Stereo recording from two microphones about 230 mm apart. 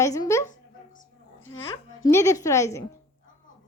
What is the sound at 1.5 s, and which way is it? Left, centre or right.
A woman's voice, centre.